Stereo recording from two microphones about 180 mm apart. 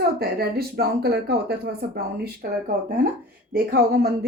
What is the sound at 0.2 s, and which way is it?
Speech, 60° right (ahead or behind).